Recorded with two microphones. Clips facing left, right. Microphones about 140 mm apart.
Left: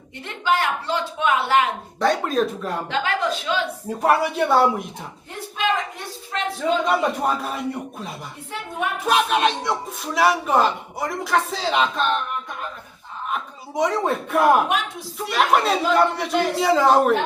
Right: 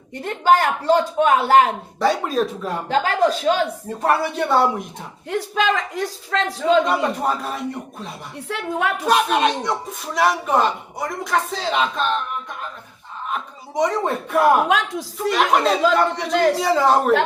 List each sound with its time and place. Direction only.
0.2 s speech: 40° right (ahead or behind)
2.0 s speech: centre (ahead or behind)
2.9 s a woman's voice: 40° right (ahead or behind)
3.8 s speech: 5° left (ahead or behind)
5.3 s speech: 90° right
6.6 s speech: 5° left (ahead or behind)
8.5 s speech: 90° right
9.0 s speech: centre (ahead or behind)
13.3 s speech: centre (ahead or behind)
14.7 s speech: 90° right
15.2 s speech: centre (ahead or behind)